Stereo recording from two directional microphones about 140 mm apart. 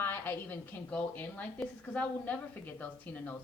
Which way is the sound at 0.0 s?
15° left (ahead or behind).